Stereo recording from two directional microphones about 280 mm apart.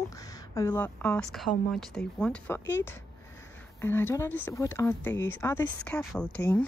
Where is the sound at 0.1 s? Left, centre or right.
Centre.